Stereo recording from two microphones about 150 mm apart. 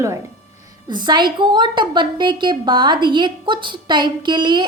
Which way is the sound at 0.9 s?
30° right (ahead or behind).